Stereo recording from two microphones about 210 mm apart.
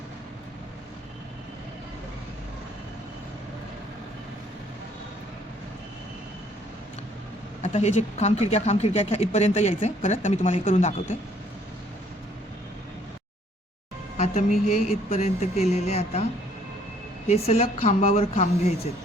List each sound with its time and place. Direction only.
7.6 s speech: 30° left (ahead or behind)
14.2 s a woman's voice: 35° left (ahead or behind)
17.2 s speech: 30° left (ahead or behind)